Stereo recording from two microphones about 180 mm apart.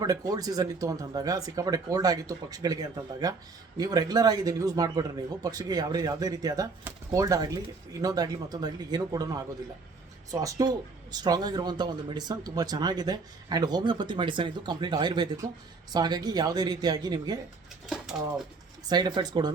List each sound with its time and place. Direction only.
0.0 s speech: 20° right (ahead or behind)
17.8 s speech: centre (ahead or behind)
18.9 s speech: 25° right (ahead or behind)